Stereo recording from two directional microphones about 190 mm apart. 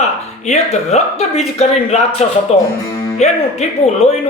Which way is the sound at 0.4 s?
35° left (ahead or behind).